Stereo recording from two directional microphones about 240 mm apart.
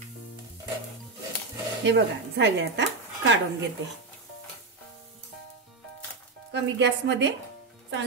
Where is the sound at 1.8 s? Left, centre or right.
Right.